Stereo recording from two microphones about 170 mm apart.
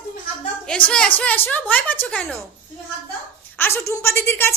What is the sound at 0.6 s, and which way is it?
A woman's voice, 5° left (ahead or behind).